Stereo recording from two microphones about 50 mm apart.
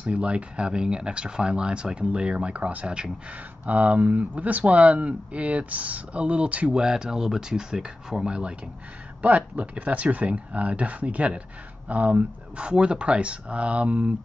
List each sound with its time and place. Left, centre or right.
0.0 s speech: right
9.2 s speech: right